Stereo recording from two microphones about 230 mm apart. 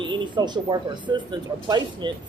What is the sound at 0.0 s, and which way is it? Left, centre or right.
Speech, centre.